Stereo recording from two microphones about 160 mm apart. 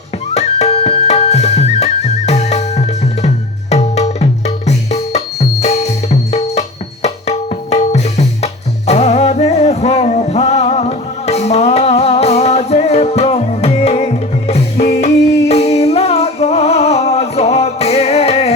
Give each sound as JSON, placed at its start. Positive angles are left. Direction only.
{"t": 0.3, "sound": "music", "side_deg": 40}